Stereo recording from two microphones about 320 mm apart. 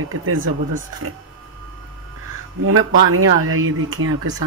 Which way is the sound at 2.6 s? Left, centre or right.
Right.